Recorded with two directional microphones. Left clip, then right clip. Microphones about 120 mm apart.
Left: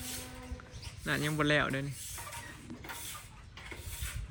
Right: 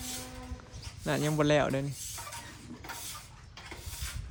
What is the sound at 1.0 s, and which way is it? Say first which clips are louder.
Speech: right 3 dB; 45° right (ahead or behind).